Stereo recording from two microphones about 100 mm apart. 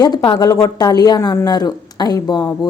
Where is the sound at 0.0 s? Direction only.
50° left (ahead or behind).